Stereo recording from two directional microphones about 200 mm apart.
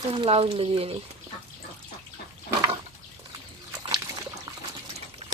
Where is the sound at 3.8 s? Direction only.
20° right (ahead or behind).